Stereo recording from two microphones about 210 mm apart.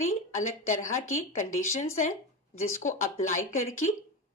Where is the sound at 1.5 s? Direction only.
75° left (ahead or behind).